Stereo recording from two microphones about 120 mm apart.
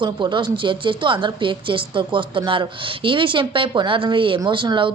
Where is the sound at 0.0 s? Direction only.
40° right (ahead or behind).